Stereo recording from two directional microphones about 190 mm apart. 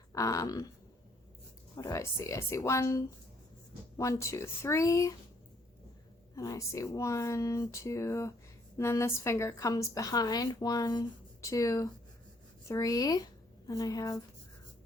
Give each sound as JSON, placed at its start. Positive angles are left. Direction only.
{"t": 0.1, "sound": "speech", "side_deg": 15}
{"t": 1.7, "sound": "a woman's voice", "side_deg": 15}
{"t": 6.3, "sound": "a woman's voice", "side_deg": 15}